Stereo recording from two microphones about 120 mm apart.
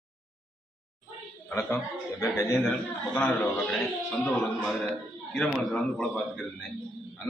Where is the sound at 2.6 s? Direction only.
10° left (ahead or behind).